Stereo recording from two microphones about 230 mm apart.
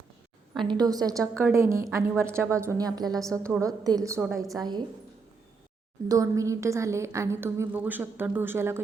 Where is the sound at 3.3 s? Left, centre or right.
Centre.